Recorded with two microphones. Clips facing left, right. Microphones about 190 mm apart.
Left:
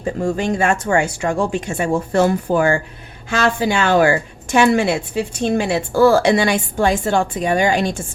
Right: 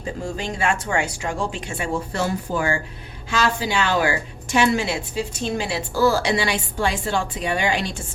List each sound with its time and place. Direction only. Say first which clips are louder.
0.2 s a woman's voice: left 8 dB; 55° left (ahead or behind)